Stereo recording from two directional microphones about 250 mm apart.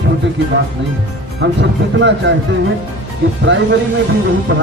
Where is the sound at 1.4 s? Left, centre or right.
Right.